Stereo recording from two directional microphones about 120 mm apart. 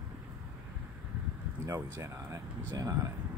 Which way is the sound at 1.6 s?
25° right (ahead or behind).